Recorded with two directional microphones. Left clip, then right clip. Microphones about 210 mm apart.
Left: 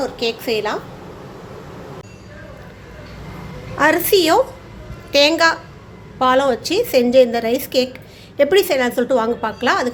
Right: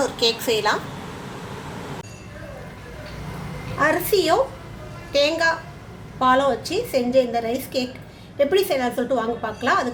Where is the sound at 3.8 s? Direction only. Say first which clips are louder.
Left 5 dB; 40° left (ahead or behind).